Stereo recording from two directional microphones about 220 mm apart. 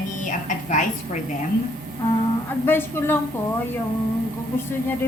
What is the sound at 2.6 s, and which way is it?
Speech, 10° left (ahead or behind).